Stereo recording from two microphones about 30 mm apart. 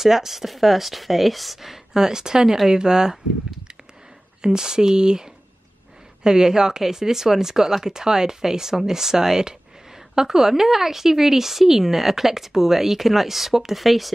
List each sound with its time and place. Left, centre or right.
0.0 s speech: centre
2.0 s speech: right
4.4 s speech: right; by 14.1 s centre